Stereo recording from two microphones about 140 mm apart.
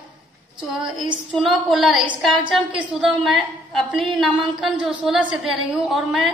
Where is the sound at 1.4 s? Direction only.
Centre (ahead or behind).